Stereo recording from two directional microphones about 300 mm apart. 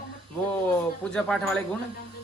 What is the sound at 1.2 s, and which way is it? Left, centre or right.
Speech, centre.